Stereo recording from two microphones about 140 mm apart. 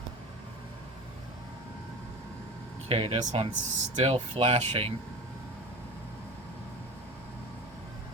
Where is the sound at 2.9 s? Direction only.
45° right (ahead or behind).